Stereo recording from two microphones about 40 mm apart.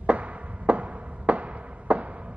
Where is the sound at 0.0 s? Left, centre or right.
Right.